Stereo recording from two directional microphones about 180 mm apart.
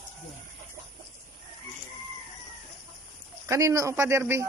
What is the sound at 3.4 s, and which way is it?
Speech, 15° right (ahead or behind).